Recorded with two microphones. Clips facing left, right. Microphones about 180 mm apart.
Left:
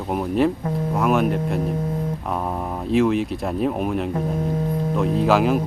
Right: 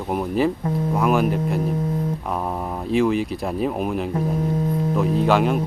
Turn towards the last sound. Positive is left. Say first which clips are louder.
# left 1 dB
turn(degrees=0)  # may be behind; listen again after turning